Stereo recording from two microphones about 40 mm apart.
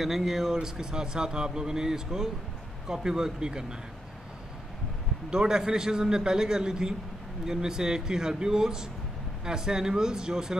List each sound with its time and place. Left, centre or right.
0.0 s a man's voice: centre
5.3 s a man's voice: centre